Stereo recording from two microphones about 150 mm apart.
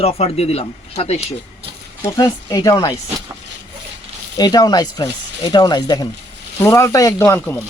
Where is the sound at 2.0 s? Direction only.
25° left (ahead or behind).